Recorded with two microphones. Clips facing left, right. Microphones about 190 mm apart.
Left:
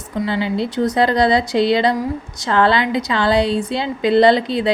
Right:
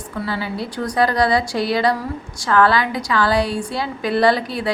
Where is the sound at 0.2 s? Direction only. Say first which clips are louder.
Left 5 dB; 20° left (ahead or behind).